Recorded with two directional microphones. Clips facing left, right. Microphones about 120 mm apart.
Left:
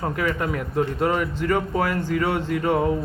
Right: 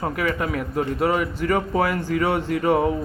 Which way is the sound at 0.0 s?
5° right (ahead or behind).